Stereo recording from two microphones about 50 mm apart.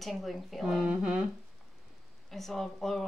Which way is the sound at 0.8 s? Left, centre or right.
Right.